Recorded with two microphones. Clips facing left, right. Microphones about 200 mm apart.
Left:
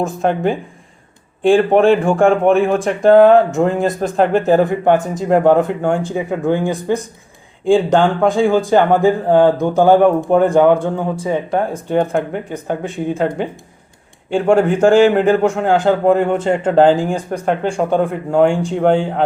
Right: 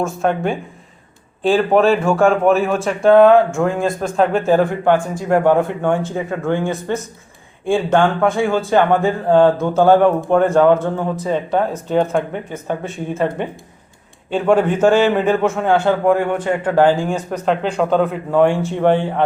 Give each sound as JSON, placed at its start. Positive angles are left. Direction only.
{"t": 0.0, "sound": "speech", "side_deg": 20}